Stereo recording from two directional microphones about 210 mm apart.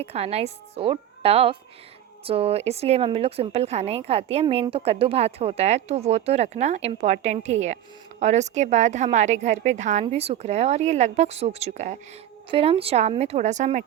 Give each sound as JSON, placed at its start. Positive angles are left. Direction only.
{"t": 0.0, "sound": "a woman's voice", "side_deg": -30}